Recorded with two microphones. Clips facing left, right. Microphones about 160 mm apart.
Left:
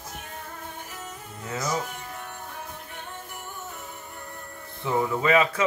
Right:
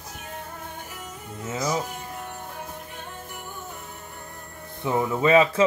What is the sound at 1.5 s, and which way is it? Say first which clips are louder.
Speech: right 2 dB; 20° right (ahead or behind).